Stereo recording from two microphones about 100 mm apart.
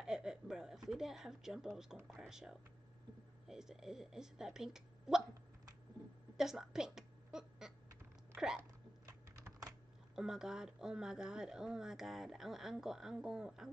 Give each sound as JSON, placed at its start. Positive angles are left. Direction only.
{"t": 0.0, "sound": "a sound", "side_deg": -5}
{"t": 2.0, "sound": "speech", "side_deg": -5}
{"t": 6.3, "sound": "a woman's voice", "side_deg": -5}
{"t": 9.0, "sound": "typing", "side_deg": -40}
{"t": 10.1, "sound": "speech", "side_deg": -5}